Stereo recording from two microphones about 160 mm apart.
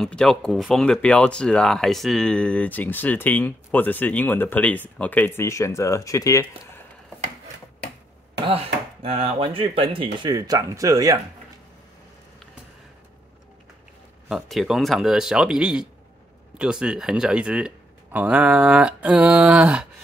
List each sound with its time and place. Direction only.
0.0 s speech: 5° left (ahead or behind); by 6.4 s 20° left (ahead or behind)
9.0 s speech: 35° right (ahead or behind); by 11.1 s 20° right (ahead or behind)
14.3 s speech: centre (ahead or behind)